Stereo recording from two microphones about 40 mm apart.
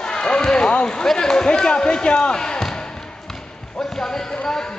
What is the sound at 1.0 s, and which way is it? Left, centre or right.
A man's voice, centre.